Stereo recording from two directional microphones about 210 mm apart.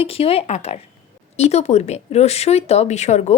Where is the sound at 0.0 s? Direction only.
25° left (ahead or behind).